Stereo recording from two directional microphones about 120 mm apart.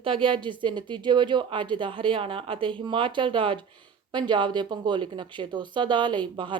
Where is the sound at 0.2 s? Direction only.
45° right (ahead or behind).